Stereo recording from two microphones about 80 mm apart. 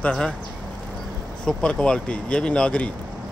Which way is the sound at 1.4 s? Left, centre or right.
Centre.